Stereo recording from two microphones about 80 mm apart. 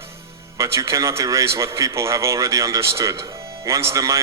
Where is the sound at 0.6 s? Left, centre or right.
Right.